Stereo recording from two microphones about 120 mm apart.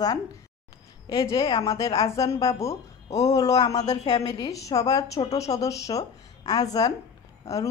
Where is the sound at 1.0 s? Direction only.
35° left (ahead or behind).